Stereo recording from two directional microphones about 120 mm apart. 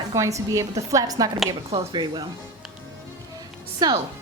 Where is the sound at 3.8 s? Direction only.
35° right (ahead or behind).